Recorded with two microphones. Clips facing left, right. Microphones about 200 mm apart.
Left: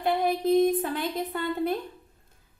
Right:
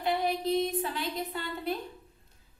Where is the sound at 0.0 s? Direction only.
50° left (ahead or behind).